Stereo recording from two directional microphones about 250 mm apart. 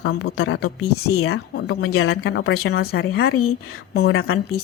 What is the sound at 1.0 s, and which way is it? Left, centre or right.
Speech, left.